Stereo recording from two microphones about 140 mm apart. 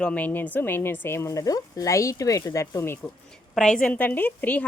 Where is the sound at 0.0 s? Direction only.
10° left (ahead or behind).